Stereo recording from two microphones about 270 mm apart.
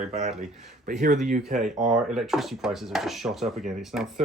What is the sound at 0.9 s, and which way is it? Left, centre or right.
Speech, right.